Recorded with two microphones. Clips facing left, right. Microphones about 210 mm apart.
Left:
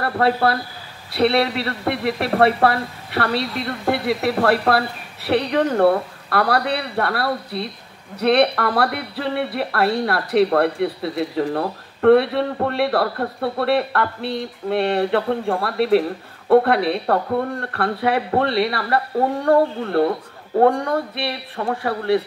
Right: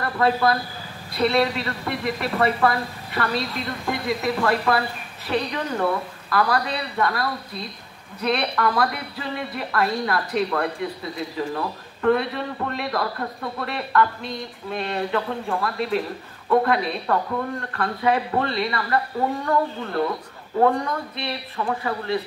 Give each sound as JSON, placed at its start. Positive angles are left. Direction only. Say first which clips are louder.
{"t": 0.0, "sound": "speech", "louder": "left 2 dB", "side_deg": 65}